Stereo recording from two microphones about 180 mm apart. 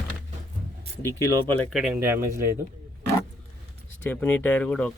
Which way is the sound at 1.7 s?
5° right (ahead or behind).